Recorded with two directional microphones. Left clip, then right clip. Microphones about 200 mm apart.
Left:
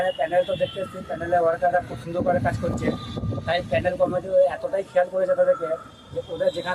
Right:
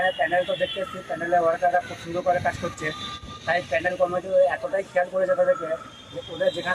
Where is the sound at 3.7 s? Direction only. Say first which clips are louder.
Left 3 dB; 20° left (ahead or behind).